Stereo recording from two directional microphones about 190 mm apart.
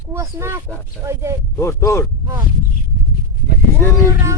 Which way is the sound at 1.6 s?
15° left (ahead or behind).